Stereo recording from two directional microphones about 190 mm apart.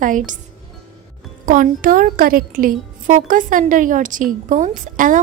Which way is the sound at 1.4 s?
45° right (ahead or behind).